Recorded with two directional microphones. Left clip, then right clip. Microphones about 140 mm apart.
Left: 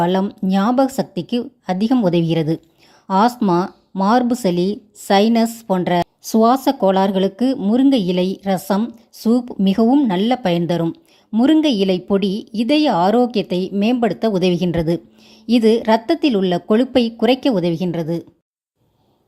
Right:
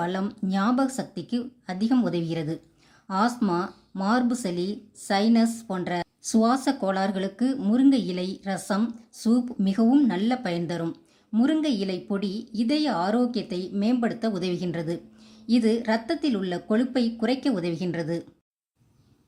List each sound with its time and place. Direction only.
0.0 s a woman's voice: 45° left (ahead or behind)
11.3 s a woman's voice: 50° left (ahead or behind); by 18.3 s 35° left (ahead or behind)